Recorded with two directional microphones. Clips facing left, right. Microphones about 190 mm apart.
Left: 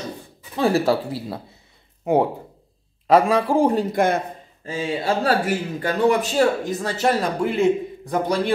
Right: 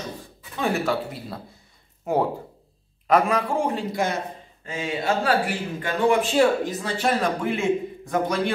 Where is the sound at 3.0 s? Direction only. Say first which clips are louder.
Left 4 dB; 30° left (ahead or behind); by 4.2 s 55° left (ahead or behind).